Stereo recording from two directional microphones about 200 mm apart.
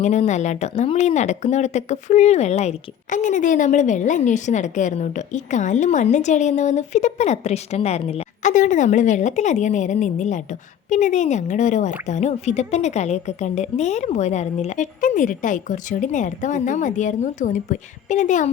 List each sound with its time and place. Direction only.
0.0 s speech: 35° left (ahead or behind)